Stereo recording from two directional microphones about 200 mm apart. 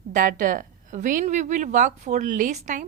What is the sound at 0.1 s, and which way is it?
A woman's voice, 40° right (ahead or behind).